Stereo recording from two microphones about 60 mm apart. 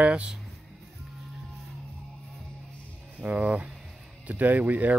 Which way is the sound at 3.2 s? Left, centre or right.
Right.